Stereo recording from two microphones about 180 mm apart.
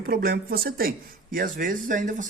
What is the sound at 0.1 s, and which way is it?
A man's voice, 55° right (ahead or behind).